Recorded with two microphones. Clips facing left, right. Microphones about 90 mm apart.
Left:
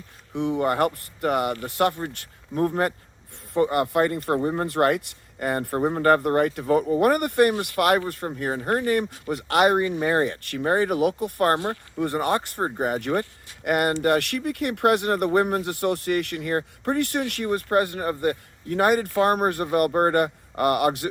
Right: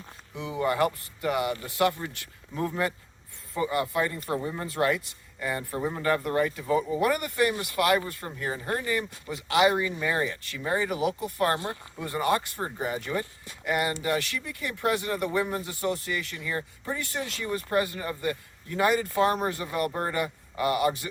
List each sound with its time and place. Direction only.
0.6 s speech: 50° left (ahead or behind)